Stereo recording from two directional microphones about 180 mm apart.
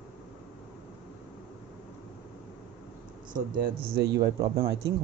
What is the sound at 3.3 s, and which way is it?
Speech, 60° right (ahead or behind).